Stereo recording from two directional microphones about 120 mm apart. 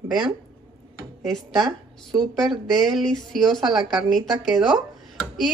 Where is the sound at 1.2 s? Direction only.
Centre (ahead or behind).